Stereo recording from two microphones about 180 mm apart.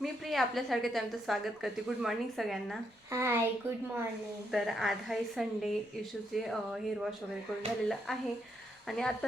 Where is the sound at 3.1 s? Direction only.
15° right (ahead or behind).